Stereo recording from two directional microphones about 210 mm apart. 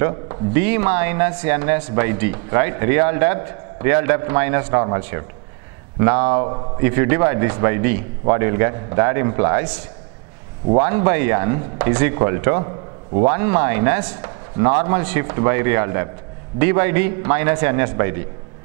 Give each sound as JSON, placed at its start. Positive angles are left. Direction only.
{"t": 0.0, "sound": "speech", "side_deg": -15}
{"t": 12.6, "sound": "a sound", "side_deg": -25}
{"t": 13.3, "sound": "speech", "side_deg": -15}